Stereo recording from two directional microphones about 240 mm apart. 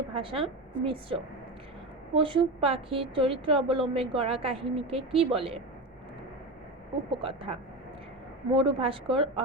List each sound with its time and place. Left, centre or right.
0.1 s a woman's voice: right
7.1 s a woman's voice: right
8.5 s a woman's voice: right